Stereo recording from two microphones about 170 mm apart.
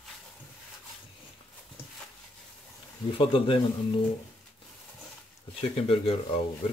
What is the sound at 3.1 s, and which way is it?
Speech, 30° left (ahead or behind).